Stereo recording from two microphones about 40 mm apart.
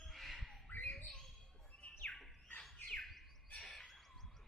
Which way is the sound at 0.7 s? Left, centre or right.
Left.